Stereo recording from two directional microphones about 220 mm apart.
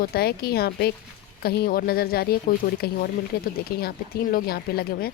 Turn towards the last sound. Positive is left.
turn(degrees=45)  # may be behind; listen again after turning